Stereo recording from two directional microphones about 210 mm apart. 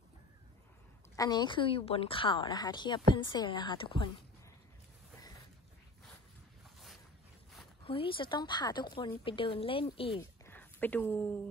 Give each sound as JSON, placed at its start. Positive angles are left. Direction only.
{"t": 1.1, "sound": "a woman's voice", "side_deg": 15}
{"t": 7.8, "sound": "a woman's voice", "side_deg": 25}
{"t": 10.4, "sound": "a sound", "side_deg": 10}